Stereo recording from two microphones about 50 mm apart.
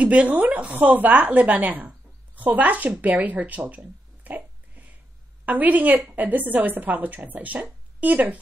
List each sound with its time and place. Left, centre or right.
0.0 s a woman's voice: right
5.4 s a woman's voice: right